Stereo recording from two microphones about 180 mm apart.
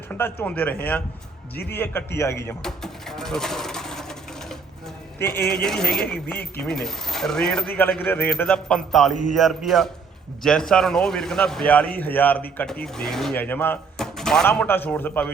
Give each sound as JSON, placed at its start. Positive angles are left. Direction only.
{"t": 0.1, "sound": "speech", "side_deg": 10}
{"t": 2.6, "sound": "pigeon", "side_deg": 0}
{"t": 5.2, "sound": "speech", "side_deg": 15}